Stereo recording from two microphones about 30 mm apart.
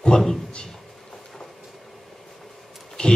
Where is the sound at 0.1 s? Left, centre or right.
Left.